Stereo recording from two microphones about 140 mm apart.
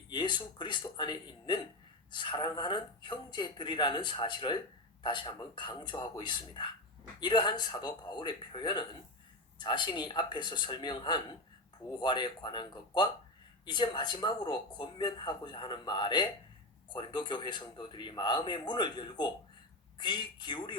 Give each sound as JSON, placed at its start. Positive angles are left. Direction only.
{"t": 0.1, "sound": "speech", "side_deg": 35}